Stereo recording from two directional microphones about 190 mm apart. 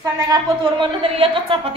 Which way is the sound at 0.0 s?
20° right (ahead or behind).